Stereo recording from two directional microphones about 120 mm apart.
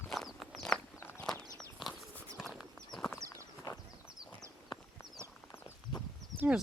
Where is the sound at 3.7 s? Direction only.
30° left (ahead or behind).